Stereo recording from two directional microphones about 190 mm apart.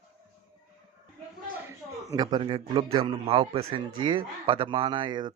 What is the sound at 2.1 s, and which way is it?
Speech, 25° right (ahead or behind).